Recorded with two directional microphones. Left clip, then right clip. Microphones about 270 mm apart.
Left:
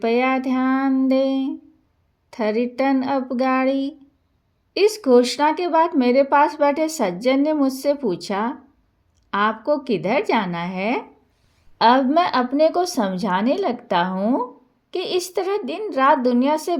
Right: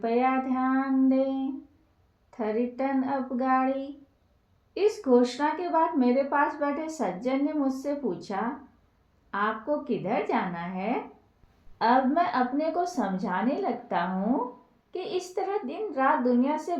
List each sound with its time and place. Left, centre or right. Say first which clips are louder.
0.0 s speech: left 6 dB; left